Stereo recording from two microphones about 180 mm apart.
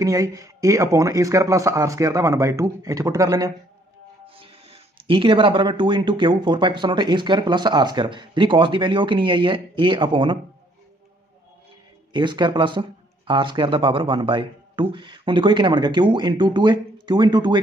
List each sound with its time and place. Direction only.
0.0 s speech: 20° right (ahead or behind)
12.1 s speech: 25° right (ahead or behind)